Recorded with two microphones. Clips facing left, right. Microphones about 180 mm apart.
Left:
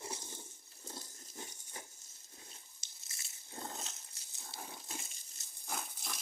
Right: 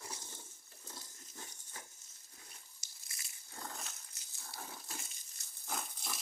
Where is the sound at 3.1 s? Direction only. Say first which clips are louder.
Left 3 dB; 25° left (ahead or behind).